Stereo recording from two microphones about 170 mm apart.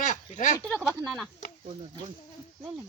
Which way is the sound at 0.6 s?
5° left (ahead or behind).